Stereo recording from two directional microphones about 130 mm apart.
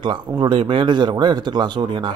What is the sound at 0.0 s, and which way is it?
Speech, 35° right (ahead or behind).